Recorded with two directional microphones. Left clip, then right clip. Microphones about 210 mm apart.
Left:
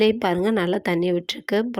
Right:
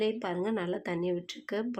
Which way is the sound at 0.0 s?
40° left (ahead or behind).